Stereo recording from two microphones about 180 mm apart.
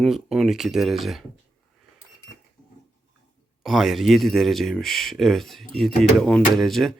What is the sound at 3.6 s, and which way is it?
Speech, centre (ahead or behind).